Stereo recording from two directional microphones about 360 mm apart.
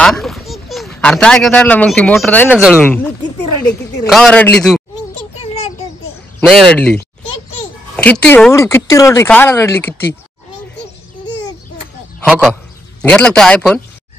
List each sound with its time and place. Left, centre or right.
0.0 s a child's voice: centre
4.1 s a man's voice: centre
5.4 s a sound: centre
6.4 s a man's voice: centre
12.3 s a man's voice: centre